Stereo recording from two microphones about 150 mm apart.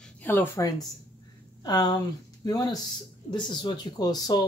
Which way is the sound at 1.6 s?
25° left (ahead or behind).